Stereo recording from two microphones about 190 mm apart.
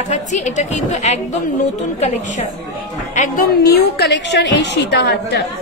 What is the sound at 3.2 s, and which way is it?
A woman's voice, 50° left (ahead or behind).